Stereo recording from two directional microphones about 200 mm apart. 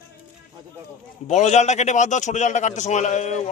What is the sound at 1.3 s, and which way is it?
A man's voice, 35° left (ahead or behind).